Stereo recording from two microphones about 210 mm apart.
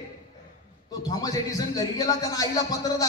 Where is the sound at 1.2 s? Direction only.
15° left (ahead or behind).